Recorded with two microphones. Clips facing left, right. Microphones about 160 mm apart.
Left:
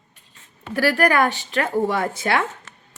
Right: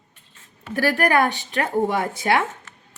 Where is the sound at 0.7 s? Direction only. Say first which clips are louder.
Left 1 dB; 20° right (ahead or behind).